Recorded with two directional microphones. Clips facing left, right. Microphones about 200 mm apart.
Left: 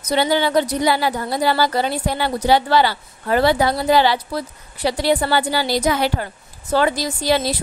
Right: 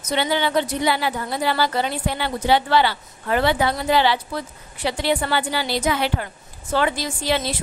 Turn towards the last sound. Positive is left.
turn(degrees=40)  # may be behind; listen again after turning